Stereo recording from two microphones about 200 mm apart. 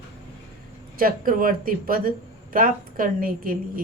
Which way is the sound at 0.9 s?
45° right (ahead or behind).